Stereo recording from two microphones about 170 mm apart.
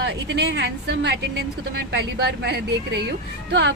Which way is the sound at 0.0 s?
85° right.